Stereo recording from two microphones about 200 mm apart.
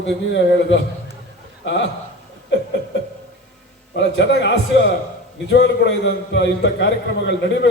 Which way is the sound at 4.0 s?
60° left (ahead or behind).